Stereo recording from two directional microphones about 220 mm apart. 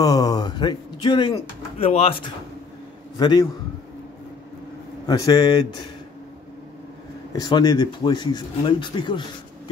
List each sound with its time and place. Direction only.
0.0 s speech: 15° left (ahead or behind)
5.0 s a man's voice: 20° left (ahead or behind)
7.3 s speech: 20° left (ahead or behind)